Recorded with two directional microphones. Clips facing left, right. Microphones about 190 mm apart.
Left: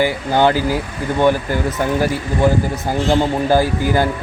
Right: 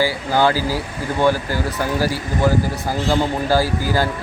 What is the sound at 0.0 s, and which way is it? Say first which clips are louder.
Speech: left 2 dB; 20° left (ahead or behind).